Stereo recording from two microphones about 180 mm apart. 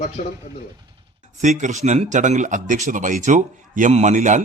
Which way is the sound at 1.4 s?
45° right (ahead or behind).